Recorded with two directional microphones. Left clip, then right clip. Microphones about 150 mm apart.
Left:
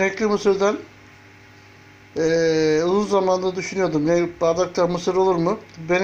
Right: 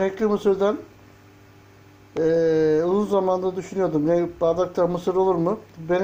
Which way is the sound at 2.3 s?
Centre (ahead or behind).